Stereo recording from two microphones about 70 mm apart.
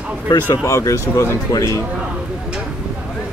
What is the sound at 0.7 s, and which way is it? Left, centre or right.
Speech, left.